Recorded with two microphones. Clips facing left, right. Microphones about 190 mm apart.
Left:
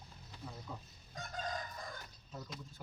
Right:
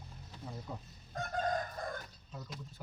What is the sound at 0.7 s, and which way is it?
Speech, 25° right (ahead or behind).